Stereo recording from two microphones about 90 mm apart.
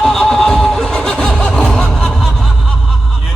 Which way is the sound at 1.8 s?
10° left (ahead or behind).